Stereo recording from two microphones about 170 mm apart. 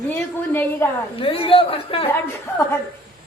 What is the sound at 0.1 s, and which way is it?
Speech, 15° left (ahead or behind).